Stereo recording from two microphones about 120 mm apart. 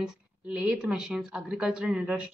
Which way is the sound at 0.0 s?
10° right (ahead or behind).